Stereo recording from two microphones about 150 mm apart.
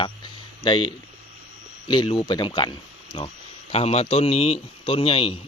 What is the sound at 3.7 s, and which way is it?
Speech, 40° left (ahead or behind).